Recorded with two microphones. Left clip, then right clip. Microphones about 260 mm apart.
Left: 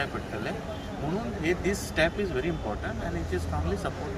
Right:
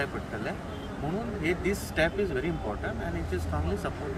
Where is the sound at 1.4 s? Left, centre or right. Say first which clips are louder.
Left 1 dB; centre.